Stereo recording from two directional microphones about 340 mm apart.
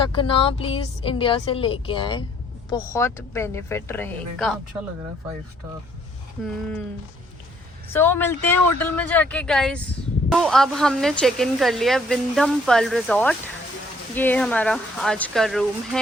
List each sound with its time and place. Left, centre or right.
0.2 s a woman's voice: centre
6.4 s speech: centre
7.9 s speech: centre